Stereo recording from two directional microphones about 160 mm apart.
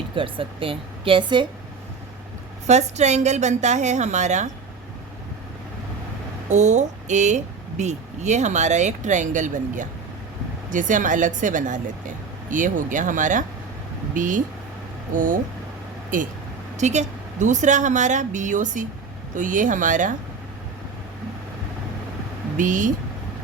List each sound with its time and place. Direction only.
0.2 s a woman's voice: 35° right (ahead or behind)
2.6 s speech: 45° right (ahead or behind)
6.5 s speech: 45° right (ahead or behind)
16.7 s speech: 45° right (ahead or behind)
22.5 s speech: 55° right (ahead or behind)